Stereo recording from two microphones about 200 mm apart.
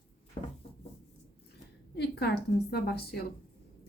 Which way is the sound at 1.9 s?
55° left (ahead or behind).